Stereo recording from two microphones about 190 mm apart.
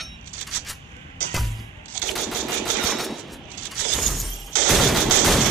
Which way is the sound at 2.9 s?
Centre (ahead or behind).